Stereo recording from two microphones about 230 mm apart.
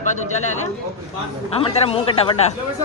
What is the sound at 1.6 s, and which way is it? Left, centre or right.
Speech, left.